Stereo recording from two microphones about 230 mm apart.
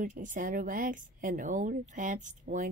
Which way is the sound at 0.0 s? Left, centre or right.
Right.